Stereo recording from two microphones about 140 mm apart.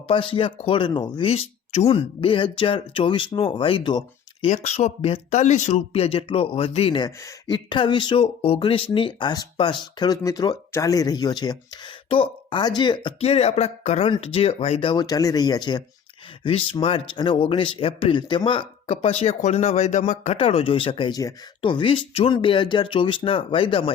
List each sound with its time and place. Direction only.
0.1 s speech: 40° left (ahead or behind)
1.3 s speech: 50° left (ahead or behind)
4.4 s speech: 50° left (ahead or behind); by 11.5 s 30° left (ahead or behind)
12.0 s speech: 40° left (ahead or behind)
13.1 s speech: 45° left (ahead or behind); by 15.8 s 30° left (ahead or behind)
16.4 s speech: 40° left (ahead or behind)
18.9 s speech: 45° left (ahead or behind)
20.3 s speech: 45° left (ahead or behind)